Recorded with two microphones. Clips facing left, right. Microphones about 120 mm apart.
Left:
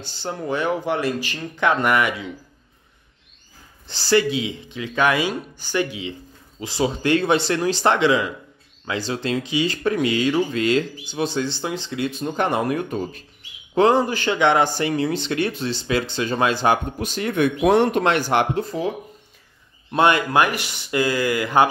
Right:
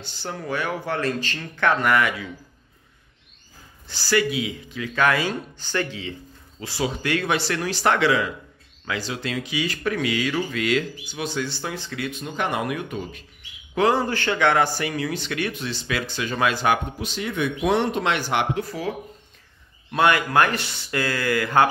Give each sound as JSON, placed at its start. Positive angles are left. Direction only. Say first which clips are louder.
{"t": 0.0, "sound": "speech", "louder": "left 4 dB", "side_deg": 25}
{"t": 3.8, "sound": "speech", "louder": "left 4 dB", "side_deg": 25}
{"t": 12.1, "sound": "speech", "louder": "left 4 dB", "side_deg": 35}
{"t": 13.9, "sound": "speech", "louder": "left 3 dB", "side_deg": 15}
{"t": 17.0, "sound": "speech", "louder": "left 5 dB", "side_deg": 50}
{"t": 18.6, "sound": "speech", "louder": "left 3 dB", "side_deg": 20}
{"t": 20.4, "sound": "speech", "louder": "left 1 dB", "side_deg": 15}